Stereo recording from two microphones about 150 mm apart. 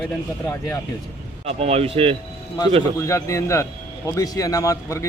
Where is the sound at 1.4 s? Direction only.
45° right (ahead or behind).